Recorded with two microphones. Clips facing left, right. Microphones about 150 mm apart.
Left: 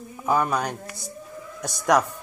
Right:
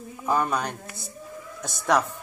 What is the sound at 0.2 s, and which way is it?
Speech, 10° left (ahead or behind).